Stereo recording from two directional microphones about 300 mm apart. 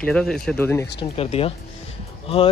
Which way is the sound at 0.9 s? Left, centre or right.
Centre.